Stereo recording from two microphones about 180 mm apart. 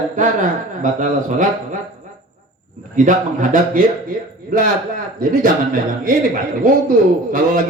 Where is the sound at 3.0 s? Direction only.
45° right (ahead or behind).